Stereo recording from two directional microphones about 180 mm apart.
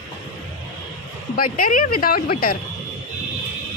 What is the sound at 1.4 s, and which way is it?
Speech, 50° left (ahead or behind).